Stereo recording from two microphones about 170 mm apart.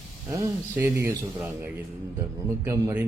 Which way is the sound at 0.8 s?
15° right (ahead or behind).